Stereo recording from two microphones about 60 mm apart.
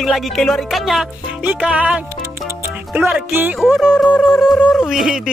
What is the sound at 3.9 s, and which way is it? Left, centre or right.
Music, centre.